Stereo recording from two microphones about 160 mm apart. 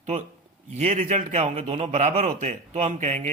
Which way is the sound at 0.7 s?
45° right (ahead or behind).